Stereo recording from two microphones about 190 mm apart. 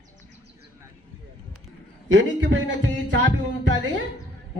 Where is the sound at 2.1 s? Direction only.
75° right (ahead or behind).